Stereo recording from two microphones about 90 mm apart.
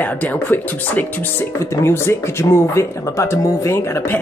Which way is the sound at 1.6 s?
30° left (ahead or behind).